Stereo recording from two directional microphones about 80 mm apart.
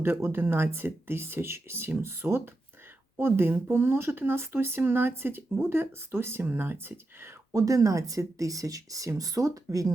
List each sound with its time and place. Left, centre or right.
0.0 s speech: right
7.5 s speech: right